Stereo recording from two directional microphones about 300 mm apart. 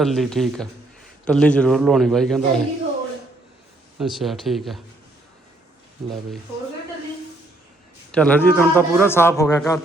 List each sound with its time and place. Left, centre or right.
0.0 s speech: centre
3.9 s speech: centre
8.1 s a man's voice: centre